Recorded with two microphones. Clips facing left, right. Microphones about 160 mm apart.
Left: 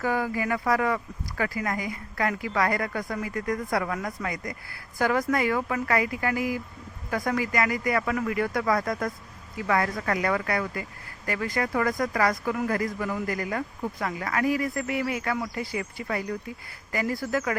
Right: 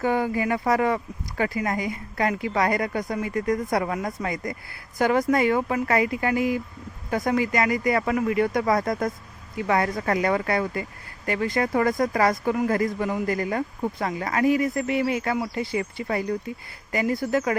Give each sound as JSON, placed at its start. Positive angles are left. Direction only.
{"t": 0.0, "sound": "speech", "side_deg": -25}